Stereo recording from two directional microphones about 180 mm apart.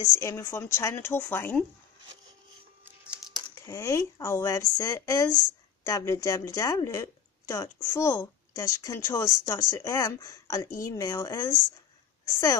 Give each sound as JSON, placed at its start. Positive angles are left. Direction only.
{"t": 0.0, "sound": "a woman's voice", "side_deg": 15}
{"t": 3.6, "sound": "a woman's voice", "side_deg": 15}